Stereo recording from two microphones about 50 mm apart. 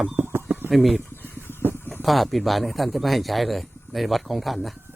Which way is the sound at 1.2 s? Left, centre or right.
Left.